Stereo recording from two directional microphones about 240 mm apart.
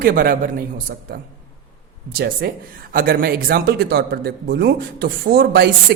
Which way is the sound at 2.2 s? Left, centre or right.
Right.